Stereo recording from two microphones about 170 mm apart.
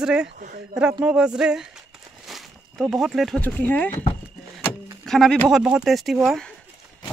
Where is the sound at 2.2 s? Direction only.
Centre (ahead or behind).